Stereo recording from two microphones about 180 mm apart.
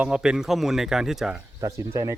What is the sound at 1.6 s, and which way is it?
Speech, 15° right (ahead or behind).